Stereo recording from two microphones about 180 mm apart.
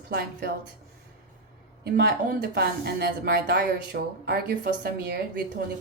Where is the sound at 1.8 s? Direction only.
55° right (ahead or behind).